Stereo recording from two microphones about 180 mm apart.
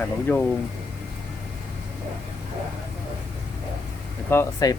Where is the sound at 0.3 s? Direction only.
10° left (ahead or behind).